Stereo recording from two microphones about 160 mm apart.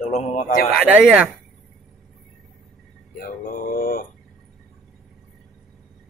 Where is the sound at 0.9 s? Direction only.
5° right (ahead or behind).